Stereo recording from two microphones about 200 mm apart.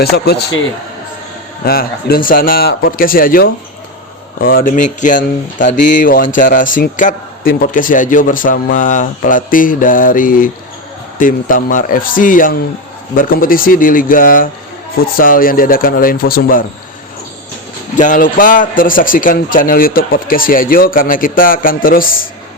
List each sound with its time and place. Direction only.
0.0 s speech: 55° left (ahead or behind)
1.6 s speech: 50° left (ahead or behind)
17.9 s speech: 40° left (ahead or behind)